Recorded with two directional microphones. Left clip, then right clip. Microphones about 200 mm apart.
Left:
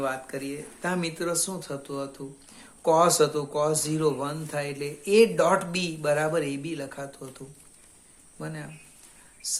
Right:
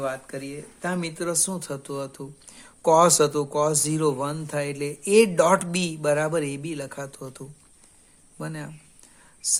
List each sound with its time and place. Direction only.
0.0 s speech: 25° right (ahead or behind); by 9.6 s 45° right (ahead or behind)